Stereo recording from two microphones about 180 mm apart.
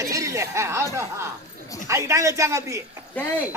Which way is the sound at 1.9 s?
15° right (ahead or behind).